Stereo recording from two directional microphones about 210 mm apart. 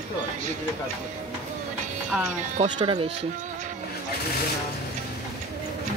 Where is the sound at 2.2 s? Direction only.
35° right (ahead or behind).